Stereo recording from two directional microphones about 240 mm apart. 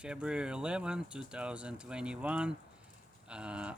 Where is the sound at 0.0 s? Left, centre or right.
Centre.